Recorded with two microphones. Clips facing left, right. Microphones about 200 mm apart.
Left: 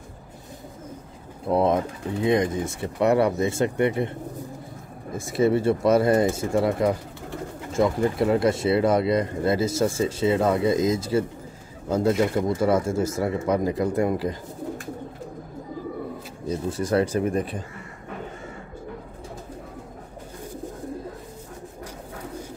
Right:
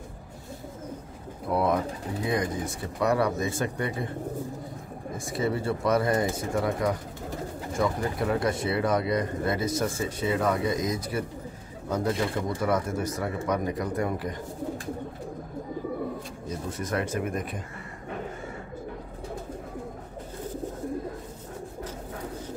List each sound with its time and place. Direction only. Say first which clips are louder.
1.5 s speech: left 4 dB; 25° left (ahead or behind)
5.1 s speech: left 7 dB; 25° left (ahead or behind)
16.4 s speech: left 8 dB; 30° left (ahead or behind)